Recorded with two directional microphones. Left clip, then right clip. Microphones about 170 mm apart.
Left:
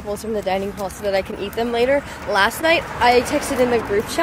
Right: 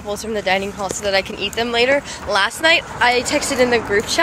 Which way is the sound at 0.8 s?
25° left (ahead or behind).